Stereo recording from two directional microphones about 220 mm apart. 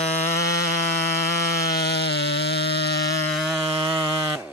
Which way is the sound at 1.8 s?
50° left (ahead or behind).